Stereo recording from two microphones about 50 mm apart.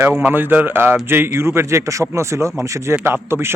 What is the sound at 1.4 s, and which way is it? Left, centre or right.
A man's voice, right.